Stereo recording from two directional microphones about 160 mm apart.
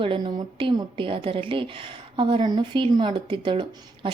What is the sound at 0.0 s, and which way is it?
A woman's voice, 30° right (ahead or behind).